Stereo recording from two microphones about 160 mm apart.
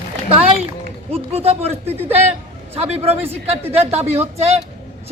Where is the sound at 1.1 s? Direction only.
40° right (ahead or behind).